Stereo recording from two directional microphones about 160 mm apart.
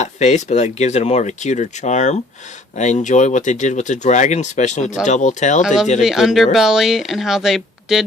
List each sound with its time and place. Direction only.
0.0 s speech: 45° left (ahead or behind)
5.6 s speech: 5° right (ahead or behind)